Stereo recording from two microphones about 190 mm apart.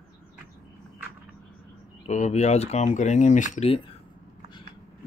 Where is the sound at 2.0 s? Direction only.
40° left (ahead or behind).